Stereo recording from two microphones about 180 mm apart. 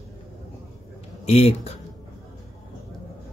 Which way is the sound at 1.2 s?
35° left (ahead or behind).